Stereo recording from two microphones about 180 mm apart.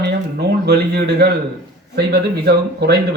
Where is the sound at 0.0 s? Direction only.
65° right (ahead or behind).